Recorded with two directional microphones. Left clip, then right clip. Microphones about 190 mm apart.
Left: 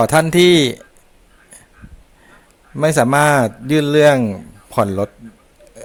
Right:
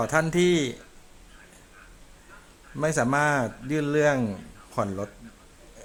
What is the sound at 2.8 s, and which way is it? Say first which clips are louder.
A man's voice: left 10 dB; 45° left (ahead or behind).